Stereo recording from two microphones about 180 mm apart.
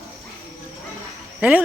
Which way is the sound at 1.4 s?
5° right (ahead or behind).